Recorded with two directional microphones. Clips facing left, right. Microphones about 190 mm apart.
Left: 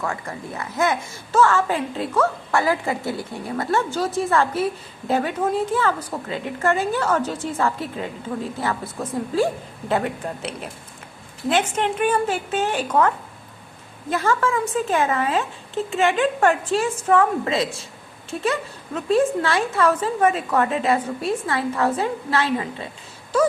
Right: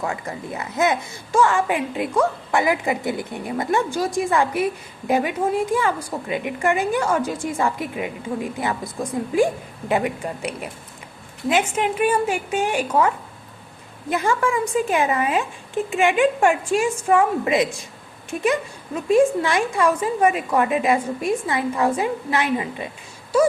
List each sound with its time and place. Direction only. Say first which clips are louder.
0.0 s a woman's voice: right 1 dB; 20° right (ahead or behind)